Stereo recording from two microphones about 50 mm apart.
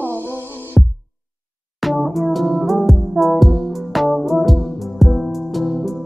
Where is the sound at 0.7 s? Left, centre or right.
Centre.